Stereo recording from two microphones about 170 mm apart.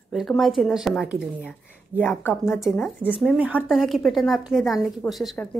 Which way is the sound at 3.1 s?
5° right (ahead or behind).